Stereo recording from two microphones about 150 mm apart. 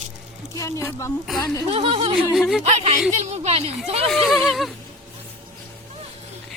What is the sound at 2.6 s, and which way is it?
Speech, 45° right (ahead or behind).